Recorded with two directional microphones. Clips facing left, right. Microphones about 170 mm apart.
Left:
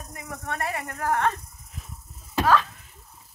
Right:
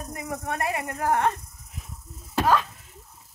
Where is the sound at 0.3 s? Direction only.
15° right (ahead or behind).